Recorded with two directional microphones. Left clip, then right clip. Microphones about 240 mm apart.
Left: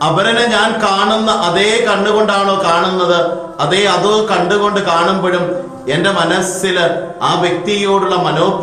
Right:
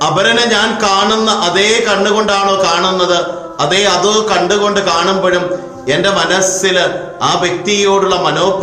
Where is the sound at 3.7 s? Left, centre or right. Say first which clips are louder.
Even; right.